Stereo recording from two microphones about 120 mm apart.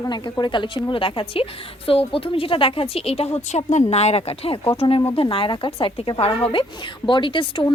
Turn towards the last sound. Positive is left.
turn(degrees=45)  # may be behind; listen again after turning